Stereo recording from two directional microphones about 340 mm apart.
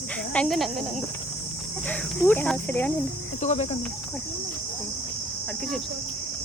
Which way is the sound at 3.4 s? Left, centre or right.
Centre.